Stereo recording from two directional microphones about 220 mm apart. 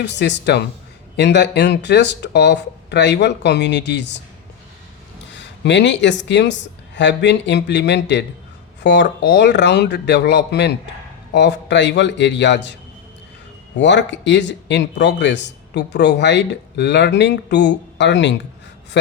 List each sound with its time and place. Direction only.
0.0 s speech: 50° left (ahead or behind)
5.3 s speech: 55° left (ahead or behind)
13.7 s speech: 55° left (ahead or behind)